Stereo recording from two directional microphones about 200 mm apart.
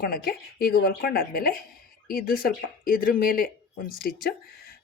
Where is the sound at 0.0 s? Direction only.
50° left (ahead or behind).